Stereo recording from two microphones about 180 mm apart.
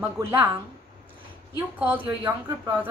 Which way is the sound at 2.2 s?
10° right (ahead or behind).